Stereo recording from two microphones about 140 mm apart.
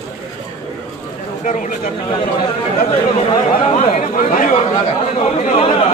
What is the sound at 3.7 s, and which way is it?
Speech, 65° left (ahead or behind).